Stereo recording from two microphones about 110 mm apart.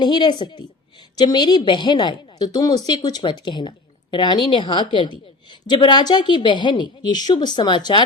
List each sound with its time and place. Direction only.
0.0 s a woman's voice: 45° left (ahead or behind)